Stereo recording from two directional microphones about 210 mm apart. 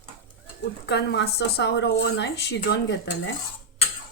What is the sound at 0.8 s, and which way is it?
Speech, 50° left (ahead or behind).